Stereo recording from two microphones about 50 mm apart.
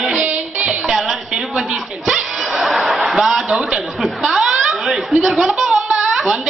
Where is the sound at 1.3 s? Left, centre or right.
Centre.